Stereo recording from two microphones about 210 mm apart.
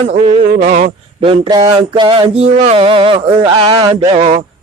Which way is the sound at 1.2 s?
25° right (ahead or behind).